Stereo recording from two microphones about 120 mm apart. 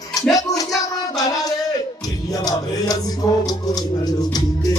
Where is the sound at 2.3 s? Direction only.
30° left (ahead or behind).